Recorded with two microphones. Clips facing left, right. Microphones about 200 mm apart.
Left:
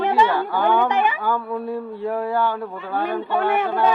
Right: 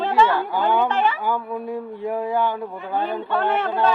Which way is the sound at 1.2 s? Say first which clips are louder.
Left 1 dB; 15° right (ahead or behind).